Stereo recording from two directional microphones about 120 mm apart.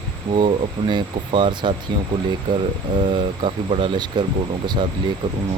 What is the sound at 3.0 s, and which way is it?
Speech, 50° right (ahead or behind).